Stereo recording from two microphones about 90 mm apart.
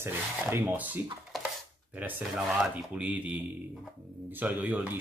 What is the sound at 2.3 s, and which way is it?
Speech, 5° right (ahead or behind).